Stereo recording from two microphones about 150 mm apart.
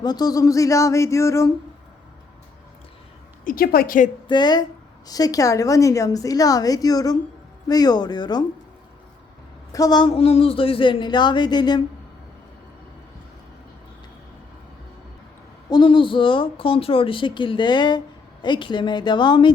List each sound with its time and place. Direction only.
0.0 s a woman's voice: 25° left (ahead or behind)
3.4 s a woman's voice: 75° left (ahead or behind)
4.3 s a woman's voice: 30° left (ahead or behind)
9.7 s a woman's voice: 25° left (ahead or behind)
10.1 s speech: 40° left (ahead or behind)
15.7 s speech: 35° left (ahead or behind)